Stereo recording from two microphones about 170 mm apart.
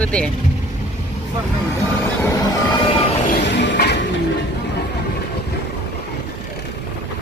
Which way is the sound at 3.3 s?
85° left.